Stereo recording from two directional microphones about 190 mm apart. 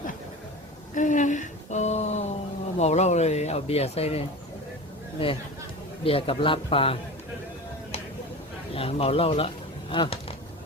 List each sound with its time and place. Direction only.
0.9 s a sound: 40° left (ahead or behind)
2.7 s speech: 35° left (ahead or behind)
5.2 s a man's voice: 30° left (ahead or behind)
8.7 s speech: 30° left (ahead or behind)